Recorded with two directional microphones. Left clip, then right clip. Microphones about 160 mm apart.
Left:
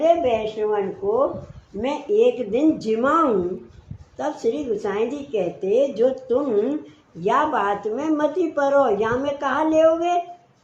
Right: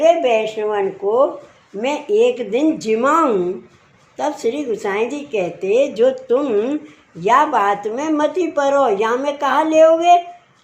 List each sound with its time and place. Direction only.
0.0 s speech: 45° right (ahead or behind)
1.0 s speech: 60° right (ahead or behind)
1.8 s speech: 45° right (ahead or behind)